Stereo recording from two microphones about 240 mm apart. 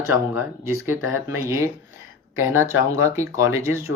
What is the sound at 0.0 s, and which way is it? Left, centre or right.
Speech, centre.